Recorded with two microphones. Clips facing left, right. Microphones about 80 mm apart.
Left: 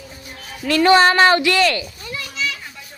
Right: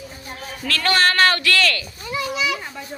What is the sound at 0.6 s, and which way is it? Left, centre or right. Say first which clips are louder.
Speech: left 7 dB; centre.